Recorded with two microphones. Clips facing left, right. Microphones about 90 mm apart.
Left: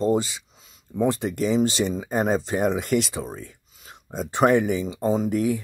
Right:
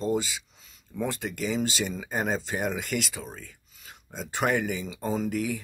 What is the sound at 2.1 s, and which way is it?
Speech, 45° left (ahead or behind).